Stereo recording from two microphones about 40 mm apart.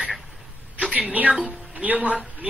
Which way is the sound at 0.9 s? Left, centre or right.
Right.